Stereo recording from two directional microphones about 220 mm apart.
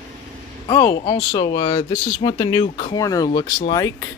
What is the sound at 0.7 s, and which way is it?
Speech, 15° left (ahead or behind).